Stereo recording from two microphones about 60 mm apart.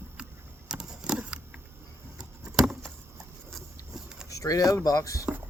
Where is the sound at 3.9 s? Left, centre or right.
Centre.